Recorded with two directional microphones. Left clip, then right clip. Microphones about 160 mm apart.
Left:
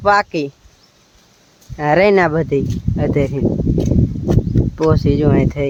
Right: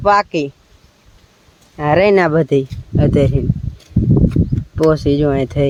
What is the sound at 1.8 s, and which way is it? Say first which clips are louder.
Speech: even; centre (ahead or behind).